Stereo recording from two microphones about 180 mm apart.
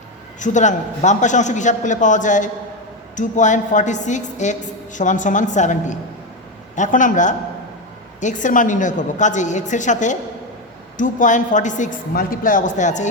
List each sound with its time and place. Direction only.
0.3 s a man's voice: 45° left (ahead or behind)